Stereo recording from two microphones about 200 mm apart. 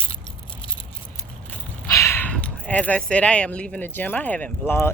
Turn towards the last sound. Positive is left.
turn(degrees=10)  # may be behind; listen again after turning